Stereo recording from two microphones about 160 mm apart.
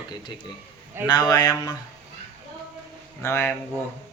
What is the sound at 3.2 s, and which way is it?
Speech, 15° left (ahead or behind).